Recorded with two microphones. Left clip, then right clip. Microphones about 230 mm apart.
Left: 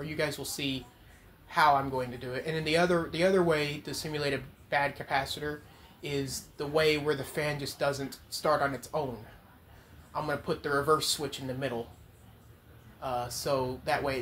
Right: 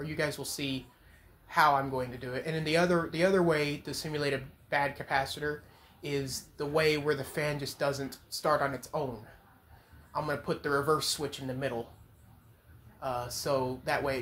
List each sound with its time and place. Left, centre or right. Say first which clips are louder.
0.0 s speech: left 1 dB; centre
10.1 s speech: left 1 dB; centre
13.0 s speech: left 1 dB; centre